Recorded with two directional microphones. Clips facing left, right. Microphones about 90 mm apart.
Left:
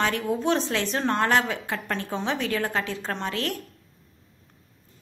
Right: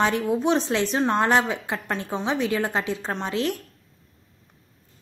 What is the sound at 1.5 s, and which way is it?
A woman's voice, 20° right (ahead or behind).